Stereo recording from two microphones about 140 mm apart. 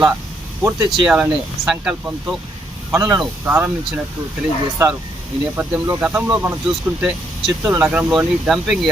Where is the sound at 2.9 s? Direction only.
20° right (ahead or behind).